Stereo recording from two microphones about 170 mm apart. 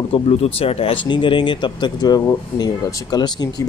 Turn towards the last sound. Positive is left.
turn(degrees=25)  # may be behind; listen again after turning